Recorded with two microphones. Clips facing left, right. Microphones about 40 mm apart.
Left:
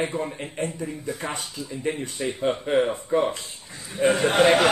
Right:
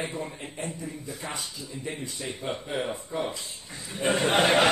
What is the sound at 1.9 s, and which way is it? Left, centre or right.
A woman's voice, left.